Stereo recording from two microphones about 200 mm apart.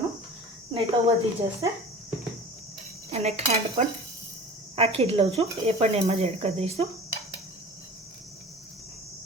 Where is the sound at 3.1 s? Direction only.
30° right (ahead or behind).